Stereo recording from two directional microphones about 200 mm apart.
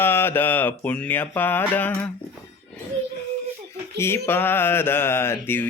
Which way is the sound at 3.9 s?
10° left (ahead or behind).